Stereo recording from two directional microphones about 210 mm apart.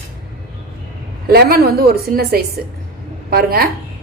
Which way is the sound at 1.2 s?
50° right (ahead or behind).